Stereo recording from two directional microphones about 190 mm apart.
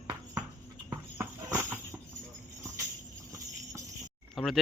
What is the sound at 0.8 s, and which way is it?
Horse, 15° right (ahead or behind).